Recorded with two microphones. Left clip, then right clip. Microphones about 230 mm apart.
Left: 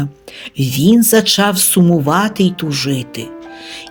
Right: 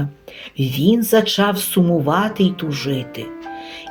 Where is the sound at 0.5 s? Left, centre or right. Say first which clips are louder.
Left 4 dB; left.